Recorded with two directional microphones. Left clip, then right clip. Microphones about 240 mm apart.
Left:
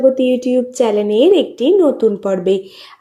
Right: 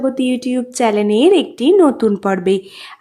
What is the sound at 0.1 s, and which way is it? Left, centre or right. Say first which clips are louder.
Speech: left 5 dB; centre.